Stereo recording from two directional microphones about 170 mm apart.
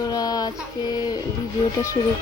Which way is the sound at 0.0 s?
20° left (ahead or behind).